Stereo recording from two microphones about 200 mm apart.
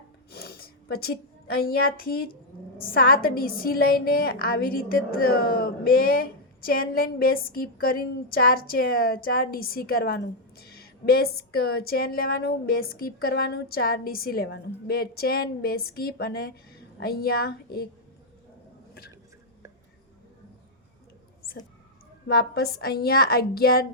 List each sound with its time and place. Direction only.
0.3 s a sound: 50° left (ahead or behind)
1.5 s a woman's voice: 50° left (ahead or behind)
22.4 s a woman's voice: 55° left (ahead or behind)